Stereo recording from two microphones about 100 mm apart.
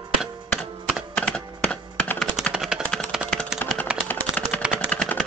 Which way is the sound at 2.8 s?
5° left (ahead or behind).